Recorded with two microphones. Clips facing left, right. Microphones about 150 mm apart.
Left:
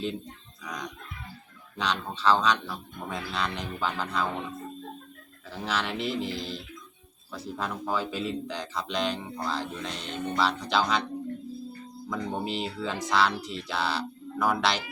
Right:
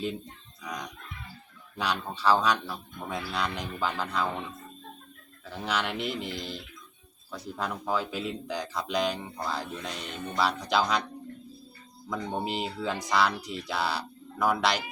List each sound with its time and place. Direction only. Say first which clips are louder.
1.8 s speech: left 1 dB; 5° right (ahead or behind)
5.5 s speech: even; centre (ahead or behind)
6.1 s speech: left 4 dB; 30° left (ahead or behind)
7.3 s speech: even; centre (ahead or behind)
12.0 s speech: even; centre (ahead or behind)